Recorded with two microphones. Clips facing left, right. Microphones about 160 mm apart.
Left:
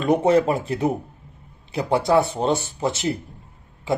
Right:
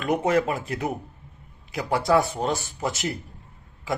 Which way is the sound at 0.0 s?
30° left (ahead or behind).